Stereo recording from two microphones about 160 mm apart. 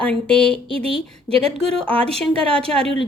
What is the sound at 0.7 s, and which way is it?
Speech, 35° right (ahead or behind).